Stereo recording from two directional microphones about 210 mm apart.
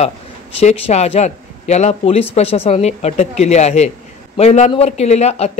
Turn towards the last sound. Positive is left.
turn(degrees=30)  # may be behind; listen again after turning